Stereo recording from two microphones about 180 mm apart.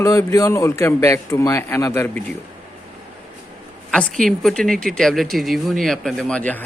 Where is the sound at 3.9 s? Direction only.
5° left (ahead or behind).